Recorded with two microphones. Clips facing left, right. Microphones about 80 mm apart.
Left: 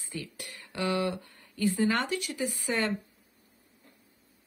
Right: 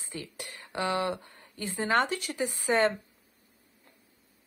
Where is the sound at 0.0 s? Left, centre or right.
Right.